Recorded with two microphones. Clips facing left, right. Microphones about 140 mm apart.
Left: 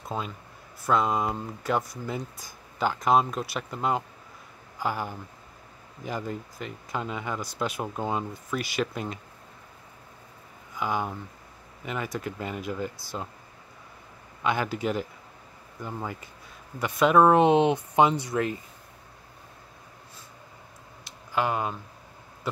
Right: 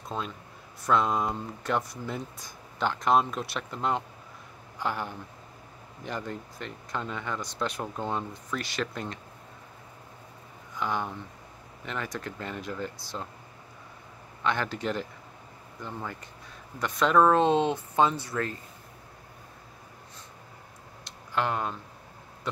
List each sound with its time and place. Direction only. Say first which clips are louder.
0.1 s speech: left 1 dB; 5° left (ahead or behind)
10.7 s speech: left 2 dB; 5° left (ahead or behind)
14.4 s speech: left 2 dB; 10° left (ahead or behind)
21.0 s a sound: left 2 dB; 5° left (ahead or behind)